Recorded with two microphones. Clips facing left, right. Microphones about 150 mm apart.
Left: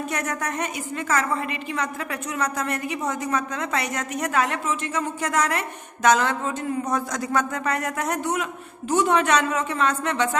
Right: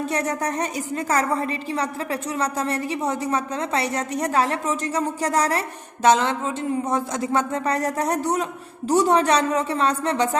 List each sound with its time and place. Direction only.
0.1 s a woman's voice: 30° right (ahead or behind)